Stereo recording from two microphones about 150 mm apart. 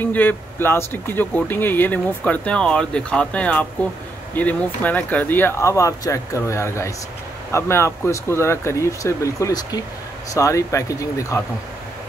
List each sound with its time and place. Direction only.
0.0 s speech: 10° left (ahead or behind)